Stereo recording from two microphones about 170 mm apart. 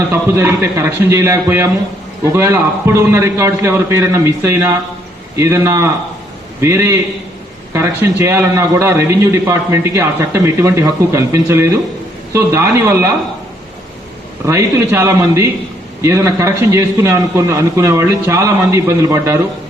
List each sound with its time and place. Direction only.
0.1 s a man's voice: 15° right (ahead or behind)
14.4 s a man's voice: 15° right (ahead or behind)